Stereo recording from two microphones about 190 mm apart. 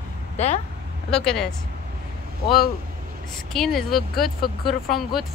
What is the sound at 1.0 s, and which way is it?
Speech, 5° left (ahead or behind).